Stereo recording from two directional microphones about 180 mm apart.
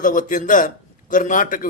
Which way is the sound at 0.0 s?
50° left (ahead or behind).